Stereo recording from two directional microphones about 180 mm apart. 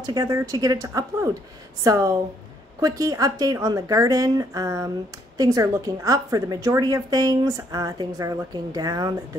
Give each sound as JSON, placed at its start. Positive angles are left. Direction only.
{"t": 0.0, "sound": "a woman's voice", "side_deg": -20}